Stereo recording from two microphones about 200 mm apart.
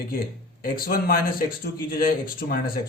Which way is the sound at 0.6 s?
45° left (ahead or behind).